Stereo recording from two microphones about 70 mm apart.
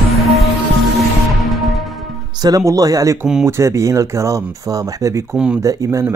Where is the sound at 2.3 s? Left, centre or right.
Right.